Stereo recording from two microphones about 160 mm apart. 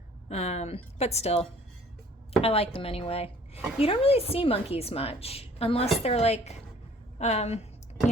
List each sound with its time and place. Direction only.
0.3 s a woman's voice: 45° left (ahead or behind)